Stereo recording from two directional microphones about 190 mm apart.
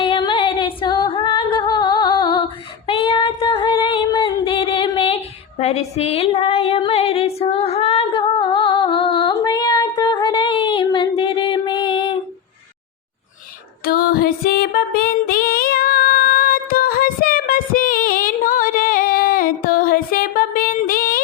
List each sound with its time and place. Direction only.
0.0 s female singing: 25° left (ahead or behind)
13.8 s music: 50° left (ahead or behind)